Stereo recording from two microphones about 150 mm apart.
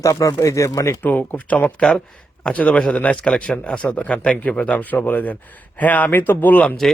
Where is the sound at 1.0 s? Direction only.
10° left (ahead or behind).